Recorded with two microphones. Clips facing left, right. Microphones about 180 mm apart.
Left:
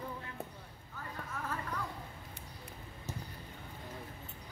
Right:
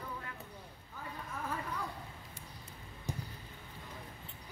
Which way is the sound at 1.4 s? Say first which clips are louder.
Right 1 dB; 15° right (ahead or behind).